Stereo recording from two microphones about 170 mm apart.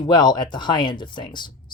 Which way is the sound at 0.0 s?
25° left (ahead or behind).